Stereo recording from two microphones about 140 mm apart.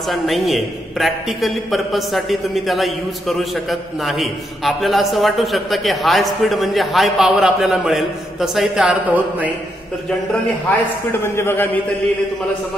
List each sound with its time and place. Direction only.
0.1 s a man's voice: centre (ahead or behind)
11.1 s a man's voice: 15° left (ahead or behind)